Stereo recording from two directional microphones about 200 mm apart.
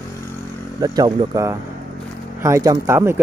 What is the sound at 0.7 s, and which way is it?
Speech, 20° right (ahead or behind).